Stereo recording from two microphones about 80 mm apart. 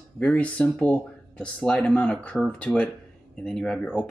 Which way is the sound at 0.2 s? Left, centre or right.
Centre.